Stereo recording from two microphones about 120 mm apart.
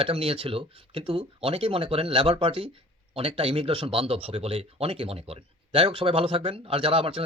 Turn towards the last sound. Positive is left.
turn(degrees=-50)  # may be behind; listen again after turning